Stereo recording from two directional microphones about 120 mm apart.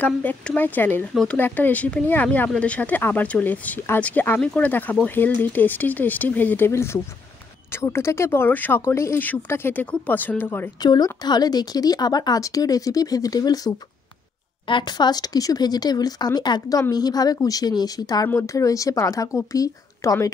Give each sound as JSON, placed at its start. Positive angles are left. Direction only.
{"t": 0.0, "sound": "speech", "side_deg": 15}
{"t": 10.8, "sound": "speech", "side_deg": 35}